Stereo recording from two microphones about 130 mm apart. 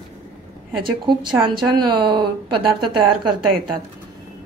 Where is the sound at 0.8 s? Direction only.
35° right (ahead or behind).